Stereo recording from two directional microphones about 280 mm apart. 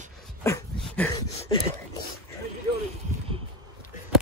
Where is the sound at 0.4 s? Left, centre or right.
Centre.